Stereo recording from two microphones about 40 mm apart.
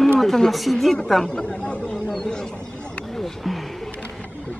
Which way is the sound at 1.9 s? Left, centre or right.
Centre.